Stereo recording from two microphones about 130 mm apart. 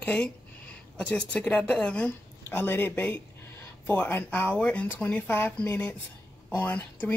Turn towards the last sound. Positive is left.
turn(degrees=15)  # may be behind; listen again after turning